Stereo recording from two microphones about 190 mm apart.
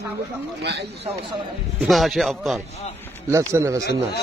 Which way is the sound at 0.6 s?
60° right (ahead or behind).